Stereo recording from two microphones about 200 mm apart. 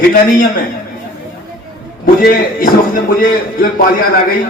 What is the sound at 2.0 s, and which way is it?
A man's voice, 45° left (ahead or behind).